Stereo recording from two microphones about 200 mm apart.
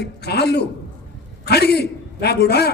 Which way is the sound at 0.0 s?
55° left (ahead or behind).